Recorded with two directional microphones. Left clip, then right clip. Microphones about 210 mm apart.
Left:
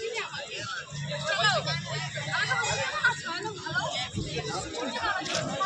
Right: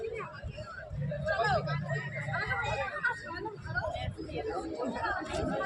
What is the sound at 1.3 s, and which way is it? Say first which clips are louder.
Vehicle: left 4 dB; 10° left (ahead or behind).